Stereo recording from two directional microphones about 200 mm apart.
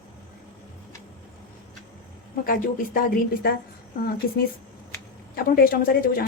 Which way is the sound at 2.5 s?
45° left (ahead or behind).